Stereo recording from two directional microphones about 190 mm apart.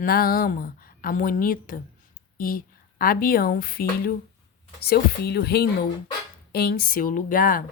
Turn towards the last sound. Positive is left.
turn(degrees=45)  # may be behind; listen again after turning